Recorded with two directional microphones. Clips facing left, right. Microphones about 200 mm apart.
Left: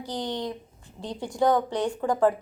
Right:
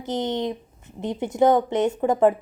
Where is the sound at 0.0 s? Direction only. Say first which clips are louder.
Right 6 dB; 20° right (ahead or behind).